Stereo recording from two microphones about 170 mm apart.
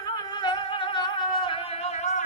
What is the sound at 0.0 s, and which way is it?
Music, 20° left (ahead or behind).